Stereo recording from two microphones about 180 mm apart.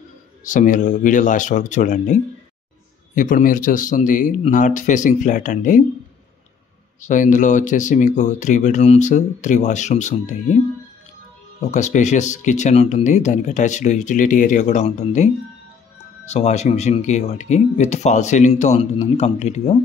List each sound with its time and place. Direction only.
0.4 s speech: 45° left (ahead or behind)
3.2 s speech: 50° left (ahead or behind)
7.0 s speech: 45° left (ahead or behind)
11.7 s speech: 40° left (ahead or behind)
16.3 s speech: 40° left (ahead or behind)